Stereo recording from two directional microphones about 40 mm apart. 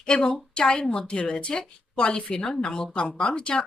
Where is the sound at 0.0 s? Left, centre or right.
Left.